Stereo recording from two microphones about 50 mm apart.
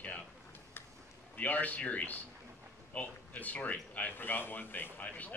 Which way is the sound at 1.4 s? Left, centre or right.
Left.